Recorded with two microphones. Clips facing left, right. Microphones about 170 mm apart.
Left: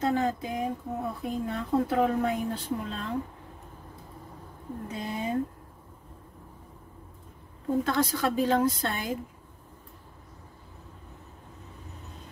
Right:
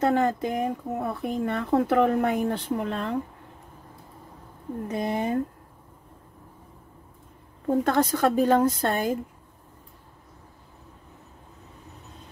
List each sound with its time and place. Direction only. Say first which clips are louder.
0.0 s speech: right 4 dB; 65° right (ahead or behind)
4.8 s speech: right 6 dB; 65° right (ahead or behind)
7.6 s a woman's voice: right 4 dB; 50° right (ahead or behind)